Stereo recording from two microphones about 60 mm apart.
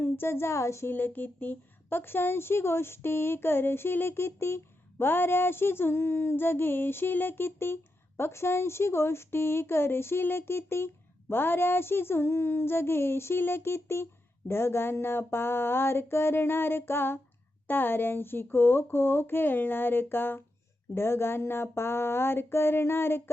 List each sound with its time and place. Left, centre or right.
0.0 s speech: left
0.9 s a woman's voice: left